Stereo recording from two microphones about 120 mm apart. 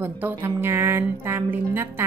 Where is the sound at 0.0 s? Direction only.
15° right (ahead or behind).